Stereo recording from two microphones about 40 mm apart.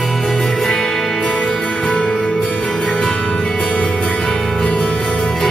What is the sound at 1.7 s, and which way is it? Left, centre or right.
Music, left.